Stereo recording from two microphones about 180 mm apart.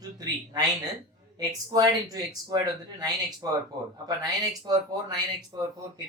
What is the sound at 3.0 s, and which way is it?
Speech, 20° right (ahead or behind).